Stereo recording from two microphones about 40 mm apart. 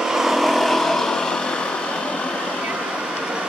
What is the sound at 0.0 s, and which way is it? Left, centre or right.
Vehicle, centre.